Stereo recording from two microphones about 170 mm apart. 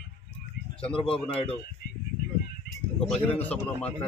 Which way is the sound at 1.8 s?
65° left (ahead or behind).